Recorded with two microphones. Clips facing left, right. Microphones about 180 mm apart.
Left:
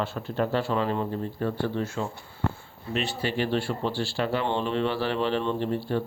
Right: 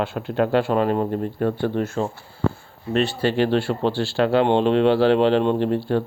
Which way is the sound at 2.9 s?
70° right (ahead or behind).